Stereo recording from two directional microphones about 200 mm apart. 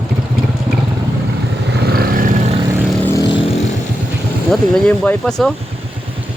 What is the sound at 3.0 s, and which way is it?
Vehicle, 15° left (ahead or behind).